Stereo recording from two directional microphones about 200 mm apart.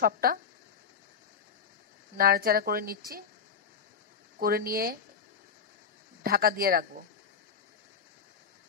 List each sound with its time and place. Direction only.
0.0 s speech: 50° right (ahead or behind)
2.1 s speech: 50° right (ahead or behind)
4.4 s speech: 45° right (ahead or behind)
6.2 s speech: 50° right (ahead or behind)